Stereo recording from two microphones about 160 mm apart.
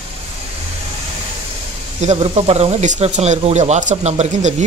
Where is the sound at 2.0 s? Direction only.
40° right (ahead or behind).